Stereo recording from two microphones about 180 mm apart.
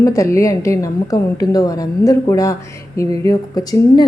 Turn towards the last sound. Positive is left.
turn(degrees=20)  # may be behind; listen again after turning